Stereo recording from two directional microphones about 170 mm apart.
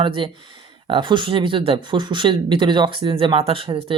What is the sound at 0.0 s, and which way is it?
Speech, 30° right (ahead or behind).